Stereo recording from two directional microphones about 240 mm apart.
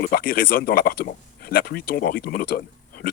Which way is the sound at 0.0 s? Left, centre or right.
Left.